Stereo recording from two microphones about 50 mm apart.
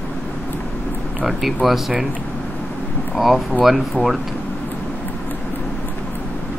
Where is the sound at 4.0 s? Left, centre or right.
Right.